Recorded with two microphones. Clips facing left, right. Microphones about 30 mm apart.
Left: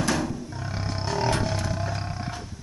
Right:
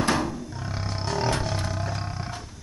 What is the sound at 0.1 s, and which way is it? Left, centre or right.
Roar, centre.